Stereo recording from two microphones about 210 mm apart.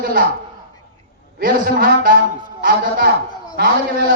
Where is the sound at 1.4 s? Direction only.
40° right (ahead or behind).